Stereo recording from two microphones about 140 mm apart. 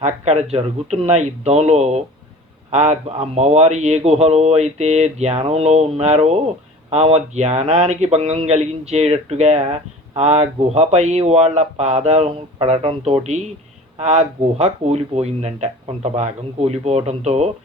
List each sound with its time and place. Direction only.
0.0 s speech: 50° right (ahead or behind)